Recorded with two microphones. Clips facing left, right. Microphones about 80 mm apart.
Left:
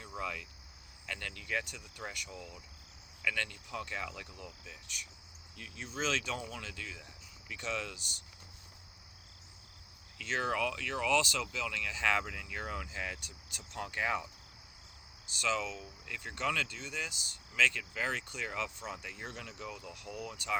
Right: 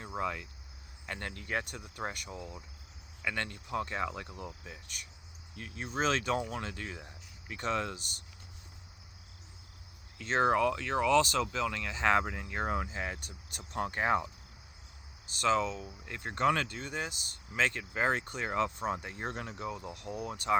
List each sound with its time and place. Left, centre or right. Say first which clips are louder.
0.0 s cricket: right 5 dB; right
1.0 s speech: right 2 dB; right
2.3 s cricket: right 4 dB; right
3.2 s speech: right 1 dB; right
10.2 s speech: right 6 dB; right
15.3 s speech: right 6 dB; right